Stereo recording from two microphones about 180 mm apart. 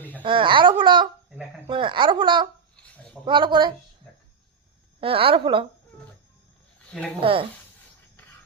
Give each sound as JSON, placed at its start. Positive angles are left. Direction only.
{"t": 0.2, "sound": "speech", "side_deg": -30}
{"t": 2.8, "sound": "a sound", "side_deg": 5}
{"t": 3.2, "sound": "speech", "side_deg": -25}
{"t": 4.9, "sound": "speech", "side_deg": -30}
{"t": 7.2, "sound": "speech", "side_deg": -30}